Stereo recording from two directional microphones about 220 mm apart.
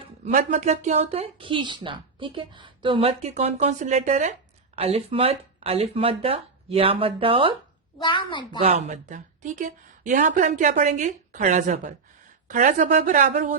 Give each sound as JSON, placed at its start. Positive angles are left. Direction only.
{"t": 0.0, "sound": "speech", "side_deg": -30}
{"t": 8.0, "sound": "a woman's voice", "side_deg": 20}
{"t": 8.5, "sound": "speech", "side_deg": -30}